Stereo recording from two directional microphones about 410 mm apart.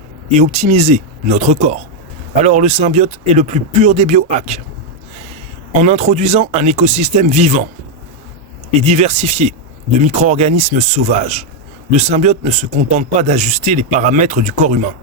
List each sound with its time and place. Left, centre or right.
0.3 s a man's voice: centre
5.8 s a man's voice: centre
8.8 s a man's voice: centre